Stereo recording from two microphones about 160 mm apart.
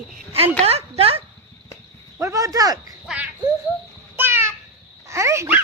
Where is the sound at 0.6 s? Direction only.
40° right (ahead or behind).